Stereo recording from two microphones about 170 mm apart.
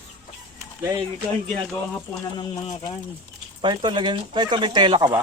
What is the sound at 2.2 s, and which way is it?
Speech, 25° left (ahead or behind).